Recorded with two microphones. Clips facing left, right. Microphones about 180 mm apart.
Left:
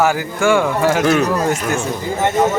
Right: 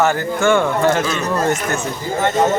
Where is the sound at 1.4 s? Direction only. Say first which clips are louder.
Left 1 dB; 10° left (ahead or behind).